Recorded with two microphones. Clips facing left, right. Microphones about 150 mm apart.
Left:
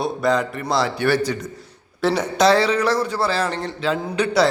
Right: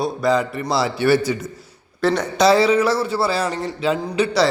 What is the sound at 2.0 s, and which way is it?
A man's voice, centre (ahead or behind).